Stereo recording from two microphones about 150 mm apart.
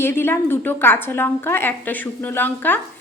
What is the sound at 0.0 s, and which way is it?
A woman's voice, 15° left (ahead or behind).